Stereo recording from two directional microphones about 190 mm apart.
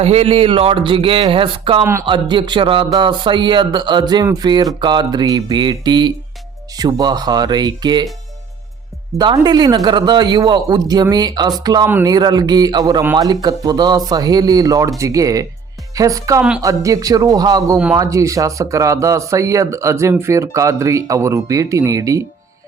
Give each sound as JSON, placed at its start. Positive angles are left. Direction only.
{"t": 0.0, "sound": "speech", "side_deg": -35}
{"t": 1.8, "sound": "speech", "side_deg": -15}
{"t": 2.0, "sound": "speech", "side_deg": -25}
{"t": 9.1, "sound": "speech", "side_deg": -20}